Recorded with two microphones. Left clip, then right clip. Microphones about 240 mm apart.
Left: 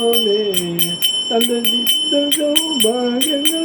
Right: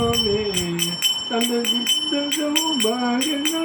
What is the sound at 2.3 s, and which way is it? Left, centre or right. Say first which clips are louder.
Music: left 5 dB; centre.